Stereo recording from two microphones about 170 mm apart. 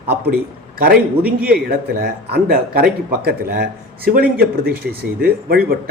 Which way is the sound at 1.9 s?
65° right (ahead or behind).